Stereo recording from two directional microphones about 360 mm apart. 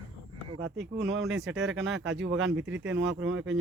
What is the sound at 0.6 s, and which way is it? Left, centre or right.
Speech, right.